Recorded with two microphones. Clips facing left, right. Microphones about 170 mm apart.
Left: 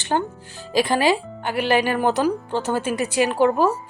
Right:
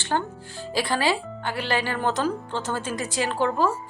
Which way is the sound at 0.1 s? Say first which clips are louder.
Left 4 dB; 25° left (ahead or behind).